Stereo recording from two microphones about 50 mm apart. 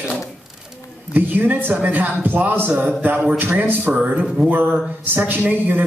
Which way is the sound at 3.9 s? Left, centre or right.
Right.